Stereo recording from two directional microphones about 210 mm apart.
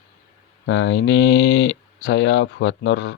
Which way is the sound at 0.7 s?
60° left (ahead or behind).